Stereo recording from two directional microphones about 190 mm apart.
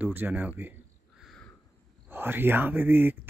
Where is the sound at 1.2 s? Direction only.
Centre (ahead or behind).